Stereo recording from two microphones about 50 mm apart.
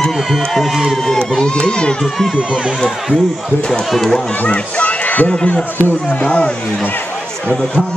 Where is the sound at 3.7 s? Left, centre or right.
Centre.